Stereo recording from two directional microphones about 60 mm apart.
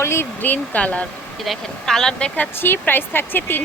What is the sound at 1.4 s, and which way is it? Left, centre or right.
Speech, centre.